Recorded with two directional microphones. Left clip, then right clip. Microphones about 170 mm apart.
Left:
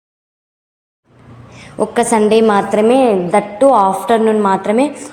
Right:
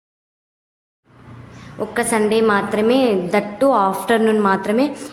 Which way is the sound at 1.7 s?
30° left (ahead or behind).